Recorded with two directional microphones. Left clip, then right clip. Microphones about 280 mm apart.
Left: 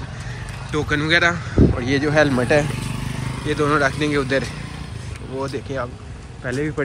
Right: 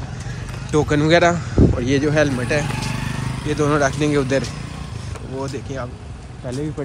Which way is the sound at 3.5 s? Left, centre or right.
Centre.